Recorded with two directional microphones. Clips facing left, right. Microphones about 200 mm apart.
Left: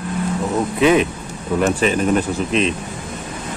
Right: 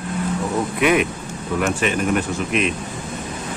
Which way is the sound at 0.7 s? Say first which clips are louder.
Left 4 dB; 30° left (ahead or behind).